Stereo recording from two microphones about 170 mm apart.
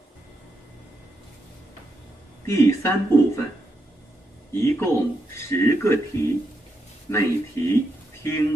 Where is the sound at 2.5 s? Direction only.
15° left (ahead or behind).